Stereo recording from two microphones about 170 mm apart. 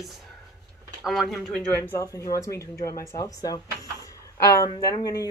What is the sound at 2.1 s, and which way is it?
Speech, 20° left (ahead or behind).